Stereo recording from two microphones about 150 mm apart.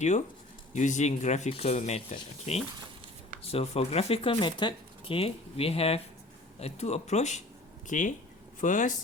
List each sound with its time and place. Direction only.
0.7 s speech: 55° left (ahead or behind)